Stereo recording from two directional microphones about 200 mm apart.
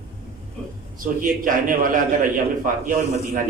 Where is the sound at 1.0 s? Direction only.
45° right (ahead or behind).